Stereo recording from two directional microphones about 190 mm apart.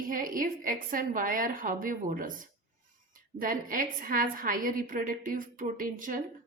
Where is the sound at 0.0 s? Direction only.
45° right (ahead or behind).